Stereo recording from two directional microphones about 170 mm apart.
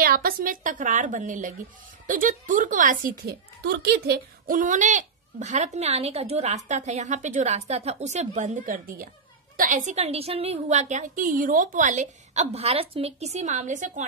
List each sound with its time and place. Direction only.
0.0 s a child's voice: 60° right (ahead or behind)
3.6 s a child's voice: 70° right (ahead or behind); by 14.0 s 45° right (ahead or behind)